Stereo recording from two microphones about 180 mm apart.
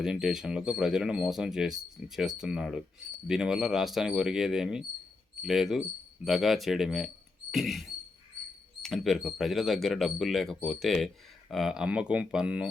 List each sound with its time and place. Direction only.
0.0 s speech: 5° right (ahead or behind)
7.5 s rodents: centre (ahead or behind)
8.8 s speech: centre (ahead or behind)